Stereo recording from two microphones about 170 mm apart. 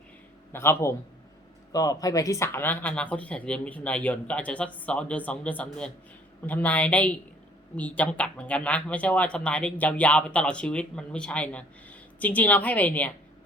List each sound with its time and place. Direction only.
0.5 s speech: 15° left (ahead or behind)